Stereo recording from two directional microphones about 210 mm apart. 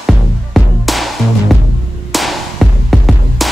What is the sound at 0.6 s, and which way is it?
Music, centre (ahead or behind).